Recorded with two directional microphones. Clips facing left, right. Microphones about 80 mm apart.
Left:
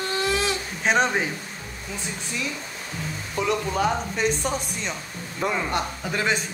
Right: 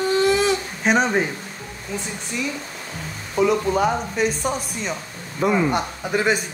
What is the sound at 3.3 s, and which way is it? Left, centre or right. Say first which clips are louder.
Speech: right 6 dB; centre.